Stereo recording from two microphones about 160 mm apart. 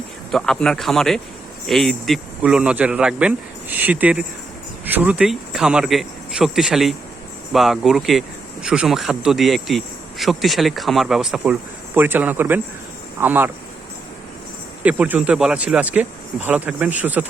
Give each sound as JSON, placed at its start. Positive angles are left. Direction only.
{"t": 0.3, "sound": "speech", "side_deg": 0}
{"t": 14.8, "sound": "speech", "side_deg": -10}